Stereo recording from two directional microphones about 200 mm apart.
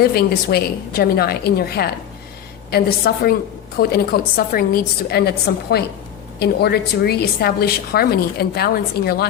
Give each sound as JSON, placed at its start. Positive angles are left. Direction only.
{"t": 0.0, "sound": "a woman's voice", "side_deg": 50}
{"t": 6.4, "sound": "a woman's voice", "side_deg": 55}